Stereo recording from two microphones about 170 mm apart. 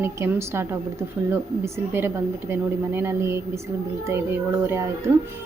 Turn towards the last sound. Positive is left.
turn(degrees=-15)  # may be behind; listen again after turning